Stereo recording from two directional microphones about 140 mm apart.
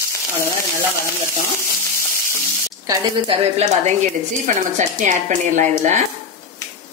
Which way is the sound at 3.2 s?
50° right (ahead or behind).